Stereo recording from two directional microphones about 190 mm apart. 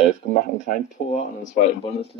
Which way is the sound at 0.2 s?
45° left (ahead or behind).